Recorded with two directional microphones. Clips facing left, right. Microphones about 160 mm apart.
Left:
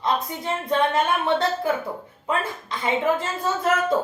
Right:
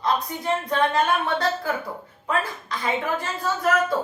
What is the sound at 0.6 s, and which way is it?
A woman's voice, 25° left (ahead or behind).